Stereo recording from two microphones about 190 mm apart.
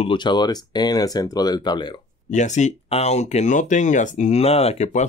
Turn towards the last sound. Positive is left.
turn(degrees=35)  # may be behind; listen again after turning